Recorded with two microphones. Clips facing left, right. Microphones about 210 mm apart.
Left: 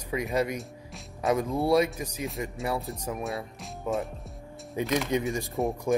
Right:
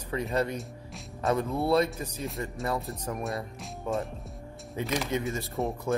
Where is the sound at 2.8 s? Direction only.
Centre (ahead or behind).